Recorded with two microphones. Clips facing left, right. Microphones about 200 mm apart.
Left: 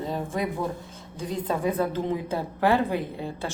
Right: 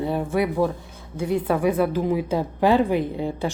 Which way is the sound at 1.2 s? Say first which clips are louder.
Right 6 dB; 65° right (ahead or behind).